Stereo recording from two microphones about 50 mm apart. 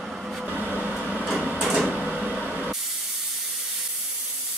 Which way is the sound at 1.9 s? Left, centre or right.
Right.